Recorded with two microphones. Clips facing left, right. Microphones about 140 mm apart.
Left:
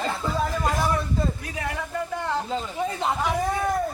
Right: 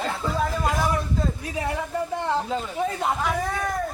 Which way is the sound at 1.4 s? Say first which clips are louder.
Right 3 dB; 25° right (ahead or behind).